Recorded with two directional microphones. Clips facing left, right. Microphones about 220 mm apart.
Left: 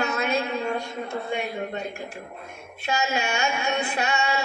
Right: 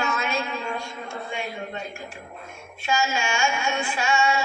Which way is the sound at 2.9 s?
65° left (ahead or behind).